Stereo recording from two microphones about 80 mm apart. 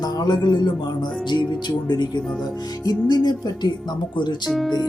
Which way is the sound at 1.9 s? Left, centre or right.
Left.